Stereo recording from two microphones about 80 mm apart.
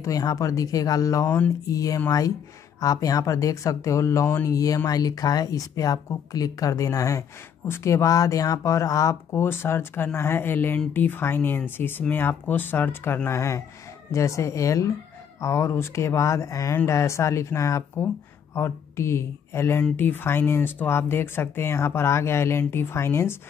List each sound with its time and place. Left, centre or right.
0.0 s speech: left
4.5 s speech: left
9.4 s speech: left